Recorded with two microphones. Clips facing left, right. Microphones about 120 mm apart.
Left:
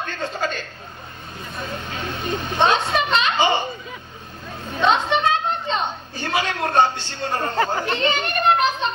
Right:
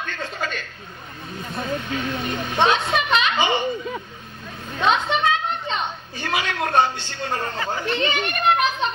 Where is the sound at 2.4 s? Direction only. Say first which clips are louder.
Left 1 dB; 35° left (ahead or behind).